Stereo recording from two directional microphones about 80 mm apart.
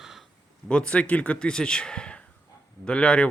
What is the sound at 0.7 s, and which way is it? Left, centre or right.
Speech, centre.